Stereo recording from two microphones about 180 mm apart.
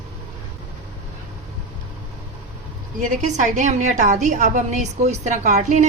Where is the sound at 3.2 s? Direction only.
45° right (ahead or behind).